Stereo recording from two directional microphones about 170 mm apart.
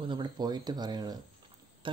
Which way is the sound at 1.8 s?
30° right (ahead or behind).